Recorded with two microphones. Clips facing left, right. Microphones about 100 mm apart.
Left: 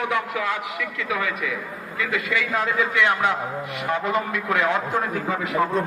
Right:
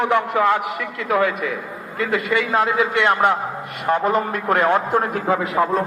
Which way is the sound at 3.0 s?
50° right (ahead or behind).